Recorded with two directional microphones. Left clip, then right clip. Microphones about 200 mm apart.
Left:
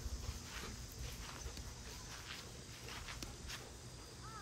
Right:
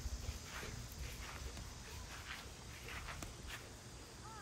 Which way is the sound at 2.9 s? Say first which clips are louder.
Right 1 dB; centre (ahead or behind).